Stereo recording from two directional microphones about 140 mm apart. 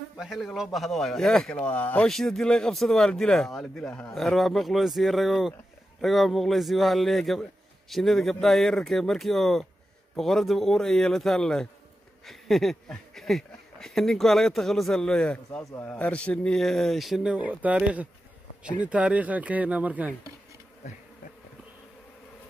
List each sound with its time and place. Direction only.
0.2 s speech: centre (ahead or behind)